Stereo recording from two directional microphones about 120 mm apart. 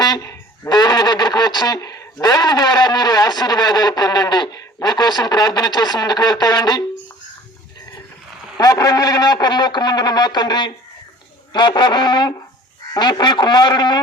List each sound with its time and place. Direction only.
0.0 s speech: 30° left (ahead or behind)
8.5 s speech: 30° left (ahead or behind)